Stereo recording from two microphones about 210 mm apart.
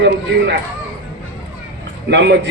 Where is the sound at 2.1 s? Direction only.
55° right (ahead or behind).